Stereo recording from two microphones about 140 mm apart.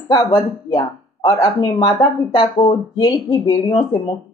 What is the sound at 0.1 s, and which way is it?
A woman's voice, 30° left (ahead or behind).